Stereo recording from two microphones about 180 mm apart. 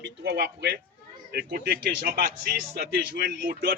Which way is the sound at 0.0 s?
65° right (ahead or behind).